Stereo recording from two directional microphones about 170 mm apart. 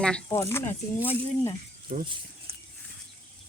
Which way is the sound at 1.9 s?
50° right (ahead or behind).